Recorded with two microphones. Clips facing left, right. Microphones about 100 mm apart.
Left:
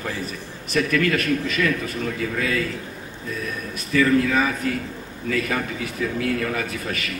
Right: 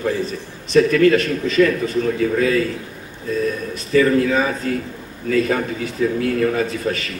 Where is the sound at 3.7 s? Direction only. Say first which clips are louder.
Right 3 dB; 30° right (ahead or behind).